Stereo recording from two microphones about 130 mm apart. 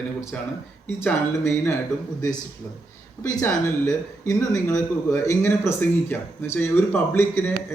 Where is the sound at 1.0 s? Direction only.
20° left (ahead or behind).